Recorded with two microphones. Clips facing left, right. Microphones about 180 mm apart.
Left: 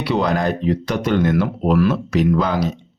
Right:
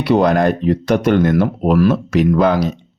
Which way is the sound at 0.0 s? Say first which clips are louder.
Right 6 dB; 50° right (ahead or behind).